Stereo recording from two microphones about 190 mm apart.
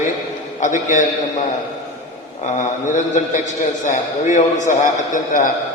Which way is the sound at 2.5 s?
40° left (ahead or behind).